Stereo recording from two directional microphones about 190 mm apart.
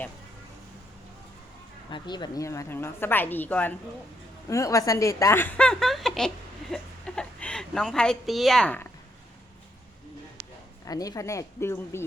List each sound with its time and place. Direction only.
1.9 s a woman's voice: 25° left (ahead or behind); by 8.9 s 10° left (ahead or behind)
10.8 s a woman's voice: 20° left (ahead or behind)